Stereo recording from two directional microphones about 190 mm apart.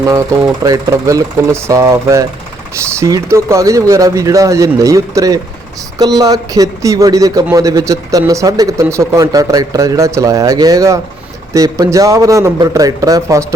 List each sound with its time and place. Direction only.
0.0 s speech: 15° right (ahead or behind)